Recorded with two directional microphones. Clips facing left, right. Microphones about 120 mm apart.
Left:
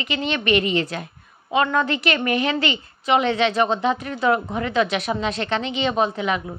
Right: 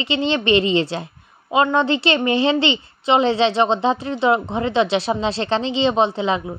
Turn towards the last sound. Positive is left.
turn(degrees=-25)  # may be behind; listen again after turning